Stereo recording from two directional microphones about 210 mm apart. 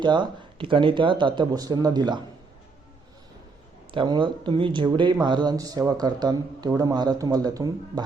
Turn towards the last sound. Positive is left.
turn(degrees=-15)  # may be behind; listen again after turning